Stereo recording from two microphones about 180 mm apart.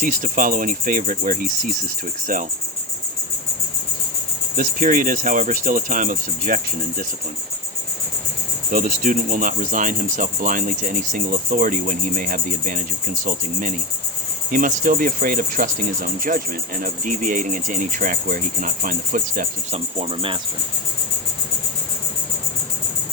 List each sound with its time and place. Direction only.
0.0 s speech: 45° right (ahead or behind)
4.5 s speech: 50° right (ahead or behind)
8.7 s speech: 50° right (ahead or behind)
19.7 s cricket: 35° right (ahead or behind)